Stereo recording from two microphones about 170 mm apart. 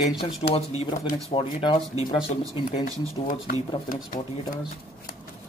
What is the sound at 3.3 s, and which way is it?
Speech, 55° left (ahead or behind).